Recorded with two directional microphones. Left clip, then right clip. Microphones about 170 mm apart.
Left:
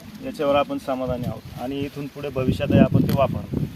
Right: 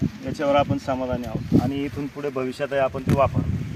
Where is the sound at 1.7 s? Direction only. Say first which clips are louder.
Right 1 dB; 30° left (ahead or behind).